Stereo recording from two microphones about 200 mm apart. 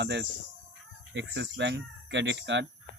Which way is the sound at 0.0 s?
60° right (ahead or behind).